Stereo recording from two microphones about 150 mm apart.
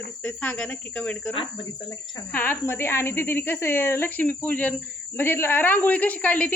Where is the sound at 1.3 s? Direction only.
35° left (ahead or behind).